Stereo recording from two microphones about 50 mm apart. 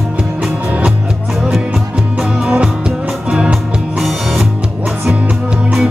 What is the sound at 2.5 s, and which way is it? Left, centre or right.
Music, centre.